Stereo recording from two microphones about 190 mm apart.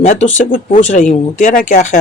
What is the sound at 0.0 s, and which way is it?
Speech, 40° left (ahead or behind).